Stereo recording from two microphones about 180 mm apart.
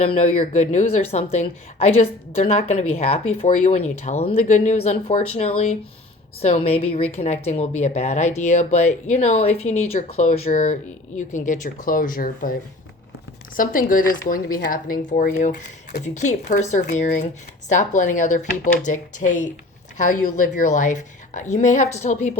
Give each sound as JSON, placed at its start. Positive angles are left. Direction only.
{"t": 0.0, "sound": "a woman's voice", "side_deg": 35}
{"t": 13.6, "sound": "speech", "side_deg": 50}